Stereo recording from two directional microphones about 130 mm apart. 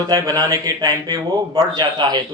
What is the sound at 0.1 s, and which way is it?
A man's voice, 30° right (ahead or behind).